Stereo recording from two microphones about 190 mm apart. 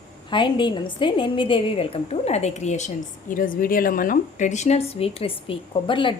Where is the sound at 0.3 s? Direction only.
25° left (ahead or behind).